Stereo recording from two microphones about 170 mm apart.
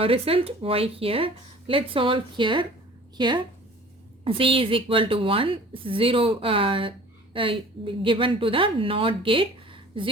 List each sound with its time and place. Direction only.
0.0 s a woman's voice: 35° right (ahead or behind)